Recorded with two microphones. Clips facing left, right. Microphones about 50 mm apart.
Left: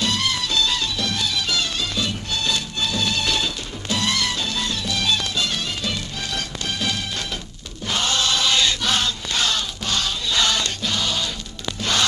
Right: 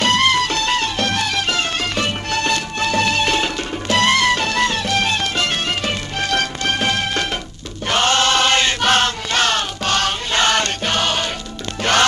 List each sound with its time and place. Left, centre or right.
0.0 s music: right
7.9 s chant: right
11.8 s music: right